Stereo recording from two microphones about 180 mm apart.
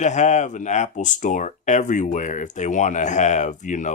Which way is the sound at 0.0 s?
40° left (ahead or behind).